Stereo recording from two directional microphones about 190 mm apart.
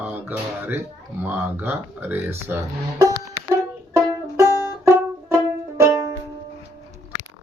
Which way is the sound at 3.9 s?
15° right (ahead or behind).